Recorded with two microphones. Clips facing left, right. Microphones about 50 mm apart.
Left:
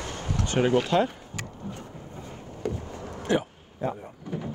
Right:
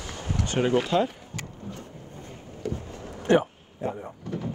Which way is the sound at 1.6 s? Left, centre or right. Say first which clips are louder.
Left 1 dB; centre.